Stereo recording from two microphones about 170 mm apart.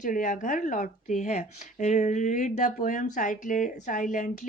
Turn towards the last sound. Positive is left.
turn(degrees=45)  # may be behind; listen again after turning